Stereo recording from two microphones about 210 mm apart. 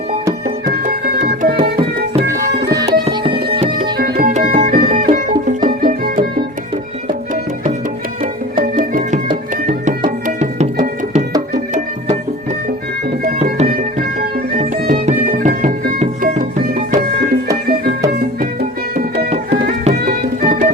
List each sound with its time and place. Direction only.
0.7 s music: 40° right (ahead or behind)
2.2 s music: 15° right (ahead or behind)
3.9 s music: 45° right (ahead or behind)
8.6 s music: 40° right (ahead or behind)
10.2 s music: 35° right (ahead or behind)
13.2 s music: 35° right (ahead or behind)
20.1 s music: 40° right (ahead or behind)